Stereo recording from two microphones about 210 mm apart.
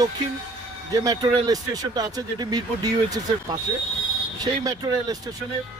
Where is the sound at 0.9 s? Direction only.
20° right (ahead or behind).